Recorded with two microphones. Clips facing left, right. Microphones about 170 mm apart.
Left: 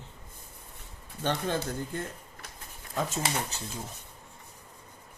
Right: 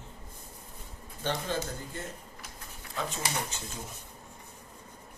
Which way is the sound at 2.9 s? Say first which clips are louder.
Left 3 dB; 45° left (ahead or behind).